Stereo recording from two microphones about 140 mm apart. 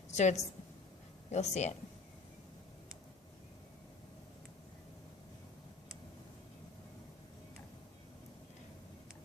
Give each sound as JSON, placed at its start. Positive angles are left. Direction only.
{"t": 0.1, "sound": "a woman's voice", "side_deg": 55}